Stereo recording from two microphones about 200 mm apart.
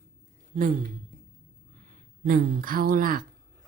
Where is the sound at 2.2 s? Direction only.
45° right (ahead or behind).